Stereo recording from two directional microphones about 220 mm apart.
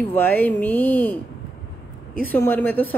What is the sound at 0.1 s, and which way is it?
Speech, 10° left (ahead or behind).